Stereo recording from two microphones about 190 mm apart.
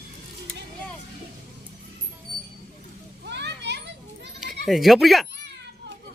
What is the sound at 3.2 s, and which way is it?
Children playing, 65° right (ahead or behind).